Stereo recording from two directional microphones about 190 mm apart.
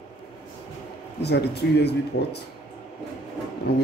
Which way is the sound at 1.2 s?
60° left (ahead or behind).